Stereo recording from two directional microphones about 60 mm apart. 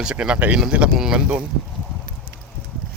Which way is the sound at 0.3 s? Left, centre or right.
Right.